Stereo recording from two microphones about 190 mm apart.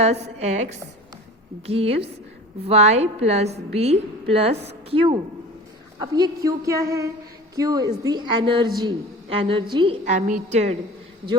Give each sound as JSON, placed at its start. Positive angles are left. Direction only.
{"t": 0.0, "sound": "a woman's voice", "side_deg": -35}
{"t": 1.6, "sound": "a woman's voice", "side_deg": -30}
{"t": 10.1, "sound": "a woman's voice", "side_deg": -40}